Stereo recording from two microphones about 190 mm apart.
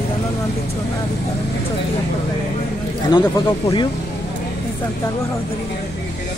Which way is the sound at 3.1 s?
25° left (ahead or behind).